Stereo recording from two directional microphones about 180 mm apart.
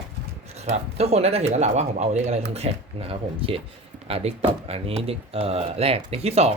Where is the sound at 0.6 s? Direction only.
35° right (ahead or behind).